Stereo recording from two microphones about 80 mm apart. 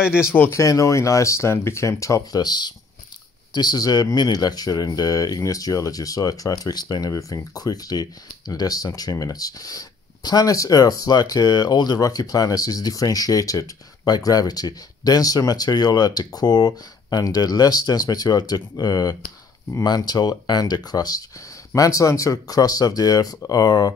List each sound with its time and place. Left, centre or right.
0.0 s speech: centre
0.3 s speech: left
0.6 s speech: left
2.3 s speech: left